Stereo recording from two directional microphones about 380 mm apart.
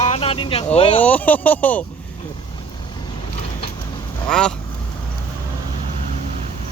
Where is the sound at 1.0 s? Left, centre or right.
Centre.